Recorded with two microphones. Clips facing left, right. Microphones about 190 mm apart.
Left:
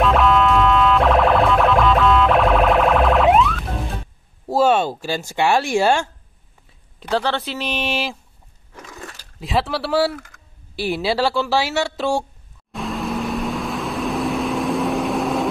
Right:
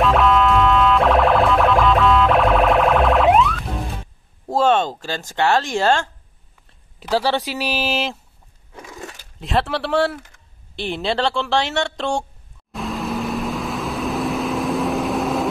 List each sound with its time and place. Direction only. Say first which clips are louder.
0.0 s car alarm: even; centre (ahead or behind)
4.5 s speech: left 1 dB; 10° left (ahead or behind)
7.0 s a woman's voice: right 2 dB; 5° right (ahead or behind)
8.8 s a sound: right 2 dB; 20° right (ahead or behind)
9.4 s a woman's voice: even; centre (ahead or behind)
12.7 s vehicle: even; centre (ahead or behind)